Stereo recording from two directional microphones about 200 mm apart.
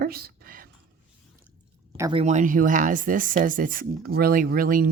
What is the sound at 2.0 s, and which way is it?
Speech, 25° right (ahead or behind).